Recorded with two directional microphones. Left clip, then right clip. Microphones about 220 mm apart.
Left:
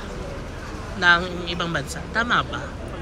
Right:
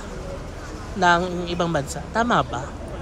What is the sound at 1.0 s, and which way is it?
Speech, 20° right (ahead or behind).